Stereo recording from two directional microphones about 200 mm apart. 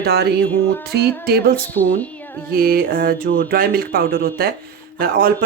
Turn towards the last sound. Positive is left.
turn(degrees=-45)  # may be behind; listen again after turning